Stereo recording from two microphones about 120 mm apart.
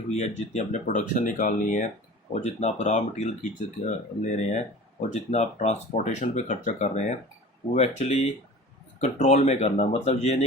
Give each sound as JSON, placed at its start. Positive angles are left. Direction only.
{"t": 0.1, "sound": "speech", "side_deg": 70}
{"t": 2.3, "sound": "speech", "side_deg": 70}